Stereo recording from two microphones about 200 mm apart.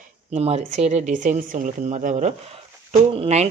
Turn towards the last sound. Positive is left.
turn(degrees=-30)  # may be behind; listen again after turning